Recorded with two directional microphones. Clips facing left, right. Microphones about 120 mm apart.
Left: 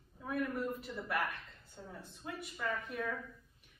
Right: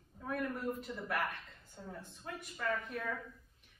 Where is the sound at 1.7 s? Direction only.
5° left (ahead or behind).